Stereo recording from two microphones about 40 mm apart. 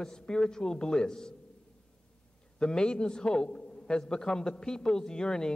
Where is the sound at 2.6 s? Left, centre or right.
Left.